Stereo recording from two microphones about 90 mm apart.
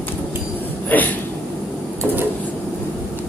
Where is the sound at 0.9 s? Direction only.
20° left (ahead or behind).